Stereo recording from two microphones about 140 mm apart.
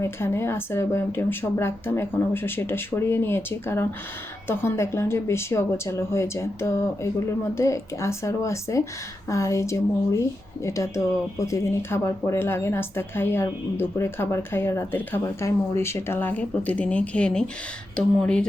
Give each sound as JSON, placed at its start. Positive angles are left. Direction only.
{"t": 0.0, "sound": "speech", "side_deg": 20}